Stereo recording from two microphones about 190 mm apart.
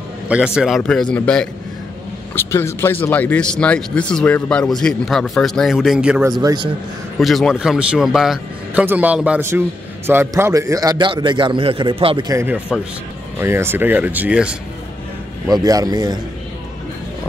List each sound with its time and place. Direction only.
0.6 s speech: centre (ahead or behind)
6.4 s a man's voice: 25° right (ahead or behind)
7.2 s a man's voice: centre (ahead or behind); by 12.3 s 30° right (ahead or behind)
12.3 s a man's voice: 15° right (ahead or behind)
15.4 s a man's voice: 20° right (ahead or behind)